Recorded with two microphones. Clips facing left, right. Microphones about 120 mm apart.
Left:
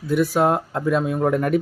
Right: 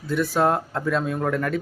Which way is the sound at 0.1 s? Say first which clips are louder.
Left 3 dB; 10° left (ahead or behind).